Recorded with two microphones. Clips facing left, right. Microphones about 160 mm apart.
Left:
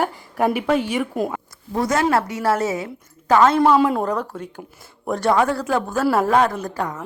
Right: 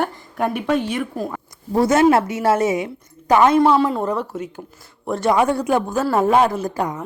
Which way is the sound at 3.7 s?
10° left (ahead or behind).